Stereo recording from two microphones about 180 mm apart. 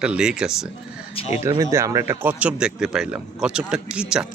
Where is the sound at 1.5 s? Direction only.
15° right (ahead or behind).